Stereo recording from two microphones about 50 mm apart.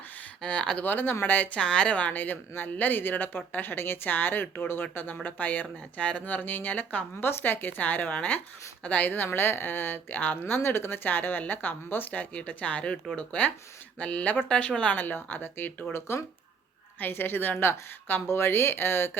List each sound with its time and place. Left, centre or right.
0.2 s a sound: left
0.9 s speech: left
1.5 s speech: left
2.1 s a woman's voice: left
5.2 s speech: left
6.3 s a woman's voice: left
14.9 s a woman's voice: left
15.9 s speech: left
17.1 s a woman's voice: left